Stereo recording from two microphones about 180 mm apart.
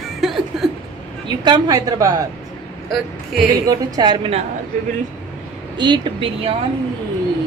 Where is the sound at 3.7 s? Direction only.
20° right (ahead or behind).